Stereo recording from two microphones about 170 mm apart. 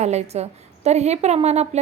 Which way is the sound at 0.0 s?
40° right (ahead or behind).